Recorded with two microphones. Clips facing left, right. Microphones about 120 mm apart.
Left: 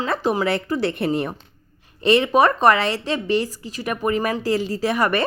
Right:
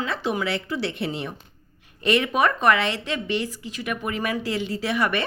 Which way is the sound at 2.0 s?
30° left (ahead or behind).